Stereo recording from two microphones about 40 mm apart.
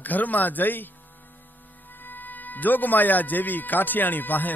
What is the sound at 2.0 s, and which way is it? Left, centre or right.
Music, left.